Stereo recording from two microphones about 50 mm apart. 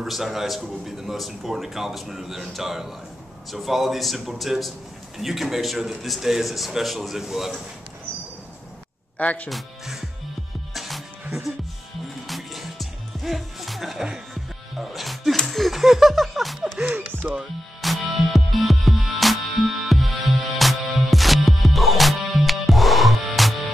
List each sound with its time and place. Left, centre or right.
0.0 s a man's voice: centre
9.2 s speech: left
9.5 s a man's voice: centre
10.7 s music: centre
12.3 s music: centre
15.3 s laughter: centre
17.2 s speech: right
17.8 s music: centre